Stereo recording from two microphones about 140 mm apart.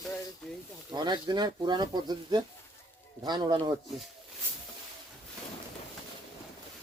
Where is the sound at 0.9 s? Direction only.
35° right (ahead or behind).